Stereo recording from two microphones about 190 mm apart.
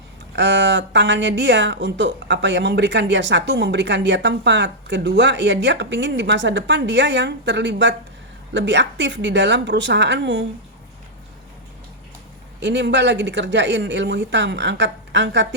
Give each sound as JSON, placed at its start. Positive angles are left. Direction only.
{"t": 0.3, "sound": "speech", "side_deg": -65}
{"t": 12.5, "sound": "speech", "side_deg": -65}